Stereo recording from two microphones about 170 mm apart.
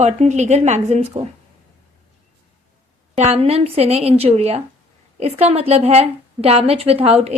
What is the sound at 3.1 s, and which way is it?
A woman's voice, 35° right (ahead or behind).